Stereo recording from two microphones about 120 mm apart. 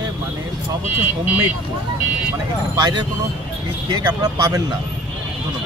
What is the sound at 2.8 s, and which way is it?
Speech, 35° right (ahead or behind).